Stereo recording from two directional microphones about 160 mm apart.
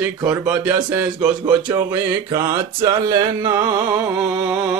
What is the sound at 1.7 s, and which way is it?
Speech, 20° right (ahead or behind).